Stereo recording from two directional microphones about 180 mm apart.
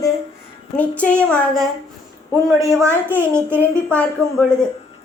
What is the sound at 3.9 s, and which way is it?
Speech, 5° left (ahead or behind).